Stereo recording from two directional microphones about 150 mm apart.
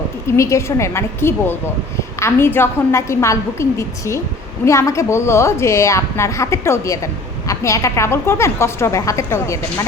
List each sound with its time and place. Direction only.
0.3 s a woman's voice: 20° left (ahead or behind)